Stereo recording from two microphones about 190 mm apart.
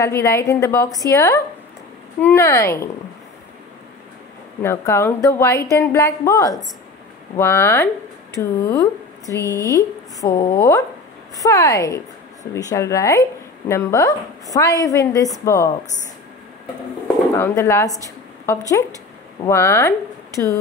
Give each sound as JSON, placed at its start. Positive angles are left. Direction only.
{"t": 0.0, "sound": "speech", "side_deg": 15}
{"t": 4.6, "sound": "speech", "side_deg": 15}
{"t": 17.4, "sound": "a woman's voice", "side_deg": 15}